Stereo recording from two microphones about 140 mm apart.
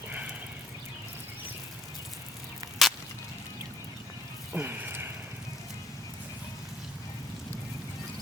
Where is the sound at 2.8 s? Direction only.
Centre (ahead or behind).